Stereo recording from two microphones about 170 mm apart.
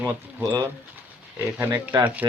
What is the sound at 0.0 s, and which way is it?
Speech, 10° right (ahead or behind).